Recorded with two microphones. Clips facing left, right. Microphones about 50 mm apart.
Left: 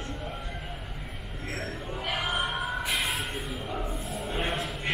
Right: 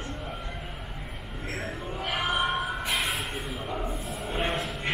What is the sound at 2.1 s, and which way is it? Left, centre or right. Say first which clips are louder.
Music: right 3 dB; centre.